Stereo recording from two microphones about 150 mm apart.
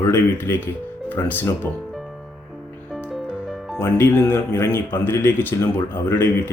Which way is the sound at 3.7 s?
10° left (ahead or behind).